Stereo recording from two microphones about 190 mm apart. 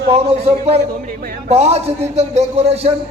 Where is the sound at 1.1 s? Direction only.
50° right (ahead or behind).